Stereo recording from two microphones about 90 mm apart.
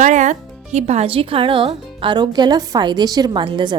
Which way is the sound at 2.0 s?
60° right (ahead or behind).